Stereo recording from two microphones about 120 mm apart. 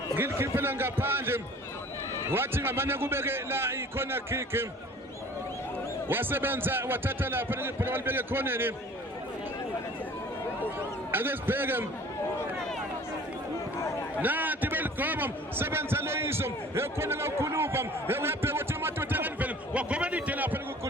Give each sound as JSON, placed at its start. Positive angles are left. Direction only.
{"t": 0.2, "sound": "a man's voice", "side_deg": -20}
{"t": 6.1, "sound": "a man's voice", "side_deg": -15}
{"t": 11.1, "sound": "a man's voice", "side_deg": -20}
{"t": 14.2, "sound": "a man's voice", "side_deg": -15}